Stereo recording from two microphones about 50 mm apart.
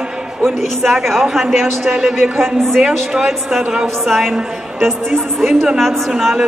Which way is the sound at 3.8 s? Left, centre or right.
Centre.